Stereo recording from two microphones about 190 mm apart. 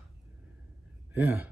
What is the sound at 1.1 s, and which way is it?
Speech, 10° right (ahead or behind).